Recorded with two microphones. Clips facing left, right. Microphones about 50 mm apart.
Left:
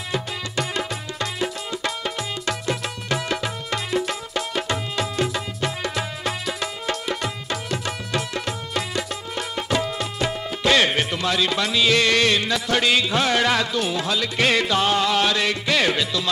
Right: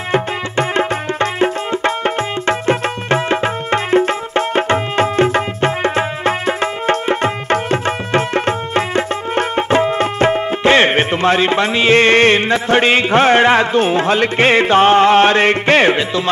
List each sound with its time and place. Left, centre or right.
0.1 s music: right